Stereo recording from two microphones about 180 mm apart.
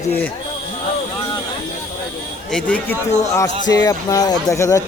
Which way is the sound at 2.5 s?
5° left (ahead or behind).